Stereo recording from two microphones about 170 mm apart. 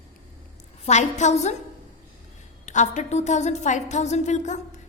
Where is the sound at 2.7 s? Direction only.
45° left (ahead or behind).